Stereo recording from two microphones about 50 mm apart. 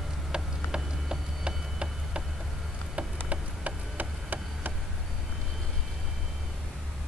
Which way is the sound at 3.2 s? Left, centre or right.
Right.